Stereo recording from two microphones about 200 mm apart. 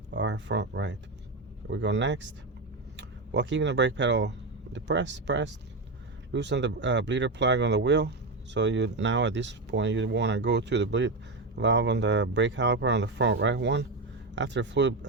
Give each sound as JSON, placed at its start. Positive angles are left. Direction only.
{"t": 0.1, "sound": "speech", "side_deg": -65}